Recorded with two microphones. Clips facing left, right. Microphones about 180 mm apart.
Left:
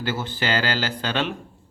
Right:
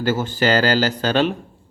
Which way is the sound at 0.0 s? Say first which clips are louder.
Right 7 dB; 45° right (ahead or behind).